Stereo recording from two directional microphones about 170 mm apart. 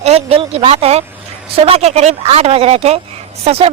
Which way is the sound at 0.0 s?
35° right (ahead or behind).